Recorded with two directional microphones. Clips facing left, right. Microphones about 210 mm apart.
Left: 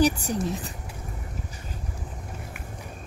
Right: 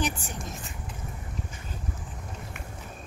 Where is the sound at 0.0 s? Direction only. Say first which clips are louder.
Left 9 dB; 40° left (ahead or behind).